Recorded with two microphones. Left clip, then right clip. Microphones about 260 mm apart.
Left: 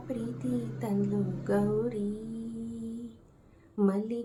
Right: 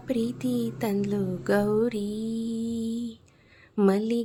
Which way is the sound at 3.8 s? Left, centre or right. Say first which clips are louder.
Right 6 dB; right.